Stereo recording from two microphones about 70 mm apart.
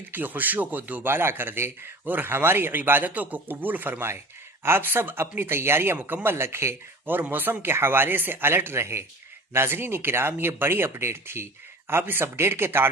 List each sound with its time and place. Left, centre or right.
0.1 s a man's voice: right